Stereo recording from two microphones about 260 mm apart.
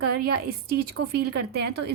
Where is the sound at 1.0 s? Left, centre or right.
Right.